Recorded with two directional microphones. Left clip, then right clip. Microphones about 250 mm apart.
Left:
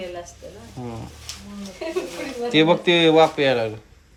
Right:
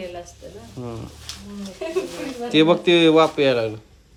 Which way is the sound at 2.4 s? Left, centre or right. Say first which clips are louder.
Right 1 dB; centre.